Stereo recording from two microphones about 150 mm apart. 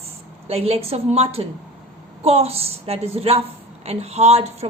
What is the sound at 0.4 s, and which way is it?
A woman's voice, 40° right (ahead or behind).